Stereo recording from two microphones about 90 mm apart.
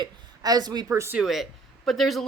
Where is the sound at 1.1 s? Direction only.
Centre (ahead or behind).